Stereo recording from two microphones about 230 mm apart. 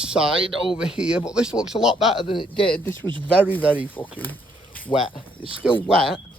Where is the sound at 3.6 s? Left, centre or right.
Centre.